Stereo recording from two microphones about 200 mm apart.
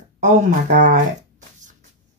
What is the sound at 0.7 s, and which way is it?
Speech, 40° right (ahead or behind).